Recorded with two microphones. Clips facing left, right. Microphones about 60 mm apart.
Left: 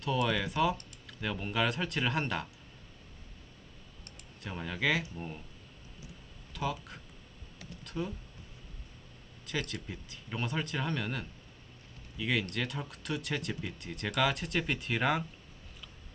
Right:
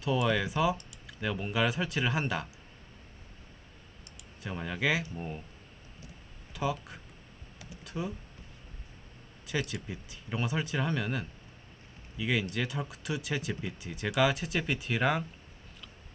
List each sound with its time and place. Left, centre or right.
0.0 s speech: centre
4.4 s speech: centre
6.5 s a sound: centre
6.7 s speech: centre
7.6 s computer keyboard: centre
9.5 s speech: centre